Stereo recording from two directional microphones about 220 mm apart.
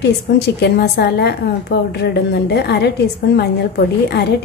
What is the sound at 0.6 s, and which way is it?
Speech, 50° left (ahead or behind).